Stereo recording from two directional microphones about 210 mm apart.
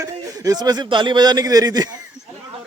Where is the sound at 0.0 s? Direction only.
15° right (ahead or behind).